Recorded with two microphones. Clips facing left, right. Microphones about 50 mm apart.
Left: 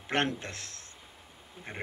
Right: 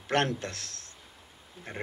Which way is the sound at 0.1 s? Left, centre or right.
Centre.